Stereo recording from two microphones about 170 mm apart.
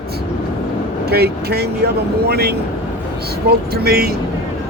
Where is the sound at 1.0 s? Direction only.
70° right (ahead or behind).